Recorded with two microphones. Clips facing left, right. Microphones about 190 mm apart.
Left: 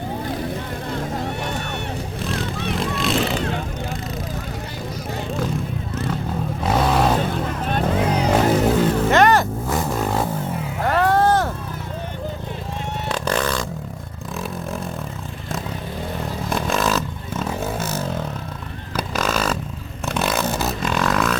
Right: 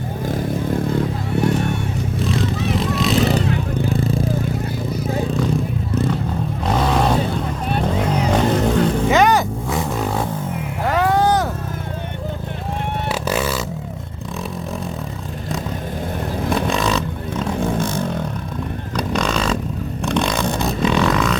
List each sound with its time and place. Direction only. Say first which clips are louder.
2.2 s vehicle: right 5 dB; centre (ahead or behind)
3.8 s vehicle: right 8 dB; 55° right (ahead or behind)
4.0 s a sound: right 9 dB; 30° right (ahead or behind)
6.7 s vehicle: even; 5° left (ahead or behind)
10.8 s music: even; centre (ahead or behind)
13.1 s a sound: even; 5° right (ahead or behind)
16.5 s vehicle: right 2 dB; centre (ahead or behind)